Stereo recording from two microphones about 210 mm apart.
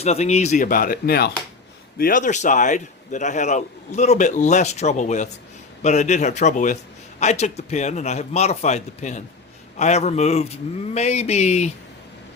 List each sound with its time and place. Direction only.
0.0 s a man's voice: 30° left (ahead or behind)